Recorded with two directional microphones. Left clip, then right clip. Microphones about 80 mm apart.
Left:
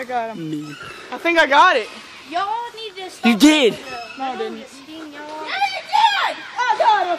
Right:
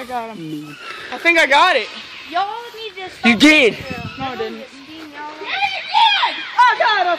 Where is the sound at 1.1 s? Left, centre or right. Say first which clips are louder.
Right 1 dB; centre.